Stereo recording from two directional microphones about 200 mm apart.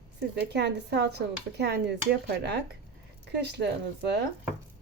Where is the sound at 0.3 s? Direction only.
55° right (ahead or behind).